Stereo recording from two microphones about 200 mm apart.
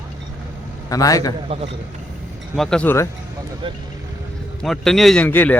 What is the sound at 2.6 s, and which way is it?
Speech, 5° left (ahead or behind).